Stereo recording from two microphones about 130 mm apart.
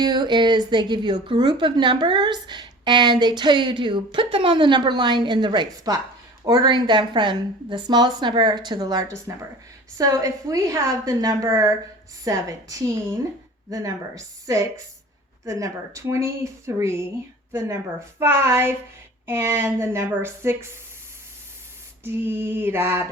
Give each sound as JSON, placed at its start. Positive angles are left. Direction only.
{"t": 0.0, "sound": "a woman's voice", "side_deg": -35}
{"t": 22.0, "sound": "female singing", "side_deg": -15}